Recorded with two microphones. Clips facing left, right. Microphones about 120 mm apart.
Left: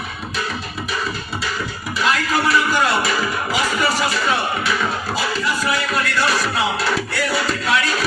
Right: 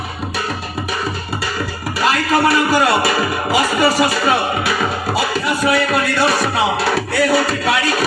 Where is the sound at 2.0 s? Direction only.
65° right (ahead or behind).